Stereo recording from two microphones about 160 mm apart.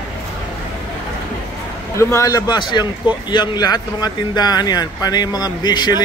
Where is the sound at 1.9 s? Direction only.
15° left (ahead or behind).